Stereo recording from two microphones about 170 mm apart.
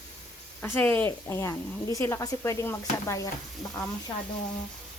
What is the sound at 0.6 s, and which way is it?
Speech, 10° left (ahead or behind).